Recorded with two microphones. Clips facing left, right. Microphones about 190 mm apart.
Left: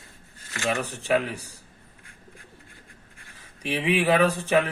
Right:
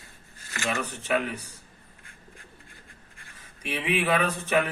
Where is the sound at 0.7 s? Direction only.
30° left (ahead or behind).